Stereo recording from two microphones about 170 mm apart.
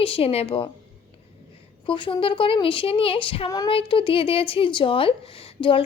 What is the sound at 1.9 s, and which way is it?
Speech, 30° left (ahead or behind).